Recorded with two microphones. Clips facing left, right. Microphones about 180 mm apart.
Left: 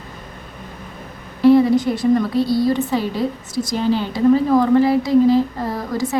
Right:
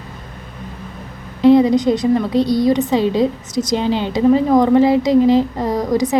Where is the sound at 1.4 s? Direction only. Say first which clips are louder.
Right 1 dB; 20° right (ahead or behind).